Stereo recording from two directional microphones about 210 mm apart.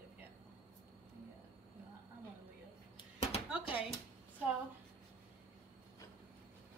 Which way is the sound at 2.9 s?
30° left (ahead or behind).